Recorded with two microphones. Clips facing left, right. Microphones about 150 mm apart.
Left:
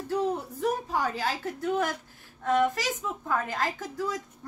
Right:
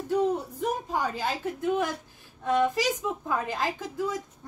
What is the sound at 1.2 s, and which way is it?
A woman's voice, 20° right (ahead or behind).